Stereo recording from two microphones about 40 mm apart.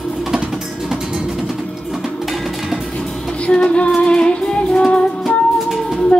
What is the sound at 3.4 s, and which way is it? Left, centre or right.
Music, left.